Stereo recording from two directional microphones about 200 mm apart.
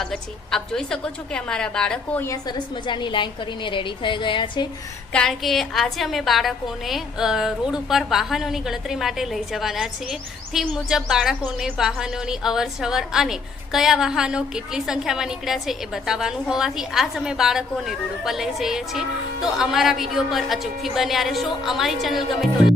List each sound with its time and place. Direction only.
0.0 s a woman's voice: 5° left (ahead or behind); by 4.6 s 25° left (ahead or behind)
5.1 s a woman's voice: centre (ahead or behind)